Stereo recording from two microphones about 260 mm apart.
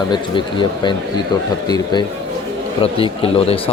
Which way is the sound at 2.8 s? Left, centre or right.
Left.